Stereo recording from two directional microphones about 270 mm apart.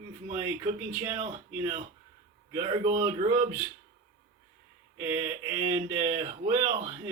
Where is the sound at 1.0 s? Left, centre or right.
Centre.